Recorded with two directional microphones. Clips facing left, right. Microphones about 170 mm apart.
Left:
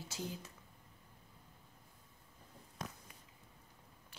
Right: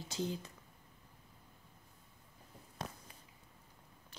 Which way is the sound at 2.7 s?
30° right (ahead or behind).